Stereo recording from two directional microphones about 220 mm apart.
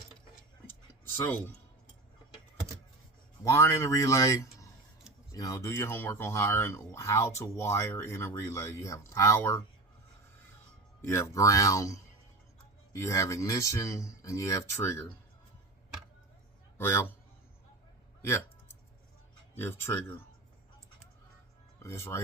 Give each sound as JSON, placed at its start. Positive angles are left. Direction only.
{"t": 1.1, "sound": "speech", "side_deg": 10}
{"t": 3.4, "sound": "speech", "side_deg": 10}
{"t": 11.0, "sound": "speech", "side_deg": 10}
{"t": 16.7, "sound": "a man's voice", "side_deg": 10}
{"t": 19.5, "sound": "speech", "side_deg": 10}
{"t": 21.8, "sound": "speech", "side_deg": 10}